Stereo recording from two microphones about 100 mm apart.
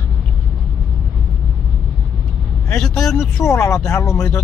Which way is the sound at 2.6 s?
5° left (ahead or behind).